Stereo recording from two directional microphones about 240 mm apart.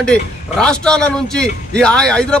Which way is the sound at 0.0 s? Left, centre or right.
Centre.